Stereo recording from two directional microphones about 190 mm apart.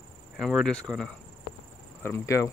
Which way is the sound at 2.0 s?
15° left (ahead or behind).